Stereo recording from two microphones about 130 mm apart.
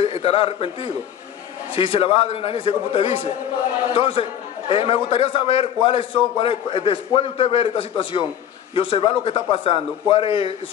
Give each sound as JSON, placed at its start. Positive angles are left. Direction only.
{"t": 0.0, "sound": "a man's voice", "side_deg": 45}